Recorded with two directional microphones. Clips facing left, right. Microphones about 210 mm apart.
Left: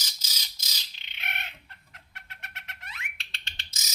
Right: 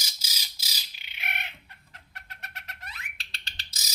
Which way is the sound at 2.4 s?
35° right (ahead or behind).